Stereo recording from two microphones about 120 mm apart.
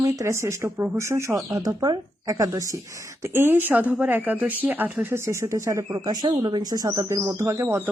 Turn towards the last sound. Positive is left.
turn(degrees=-20)  # may be behind; listen again after turning